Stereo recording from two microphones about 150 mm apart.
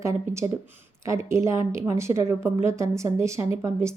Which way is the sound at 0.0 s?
20° right (ahead or behind).